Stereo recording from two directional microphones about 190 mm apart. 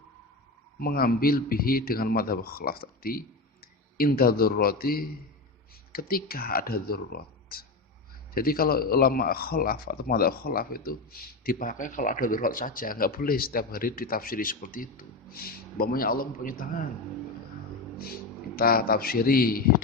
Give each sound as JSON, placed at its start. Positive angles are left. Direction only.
{"t": 0.8, "sound": "a man's voice", "side_deg": 50}
{"t": 18.0, "sound": "a man's voice", "side_deg": 50}